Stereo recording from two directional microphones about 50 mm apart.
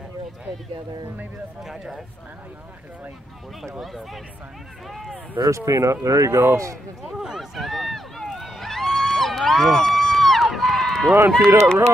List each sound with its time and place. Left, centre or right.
1.6 s speech: centre
3.8 s speech: centre
5.7 s speech: right
7.0 s speech: centre
7.5 s run: centre
8.3 s a sound: centre
10.6 s run: centre
11.3 s speech: right